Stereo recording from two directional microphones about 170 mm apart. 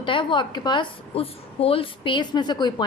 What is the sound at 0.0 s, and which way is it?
A woman's voice, 30° left (ahead or behind).